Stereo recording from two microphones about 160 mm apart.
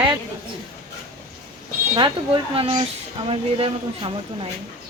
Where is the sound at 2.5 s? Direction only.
35° right (ahead or behind).